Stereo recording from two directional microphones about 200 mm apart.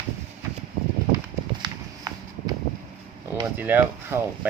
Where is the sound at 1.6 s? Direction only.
20° right (ahead or behind).